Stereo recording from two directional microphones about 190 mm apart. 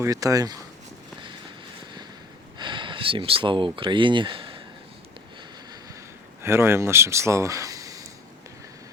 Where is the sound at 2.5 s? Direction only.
25° right (ahead or behind).